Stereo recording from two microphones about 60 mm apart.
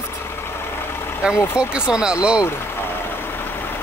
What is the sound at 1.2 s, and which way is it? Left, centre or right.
Speech, centre.